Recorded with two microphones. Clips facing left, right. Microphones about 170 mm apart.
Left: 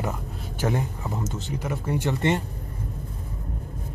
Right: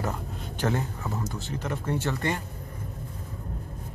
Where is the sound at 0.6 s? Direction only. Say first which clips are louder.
Left 2 dB; 15° left (ahead or behind).